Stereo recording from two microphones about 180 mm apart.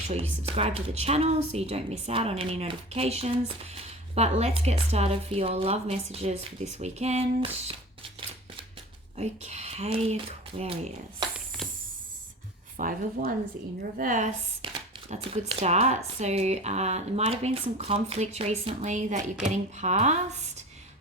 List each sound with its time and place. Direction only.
0.1 s a woman's voice: 35° right (ahead or behind)
9.1 s a woman's voice: 40° right (ahead or behind)
11.3 s a sound: centre (ahead or behind)
12.7 s a woman's voice: 50° right (ahead or behind)